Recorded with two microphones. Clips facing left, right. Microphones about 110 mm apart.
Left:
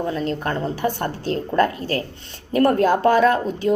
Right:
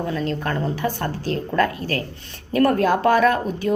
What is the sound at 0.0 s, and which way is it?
Speech, 25° left (ahead or behind).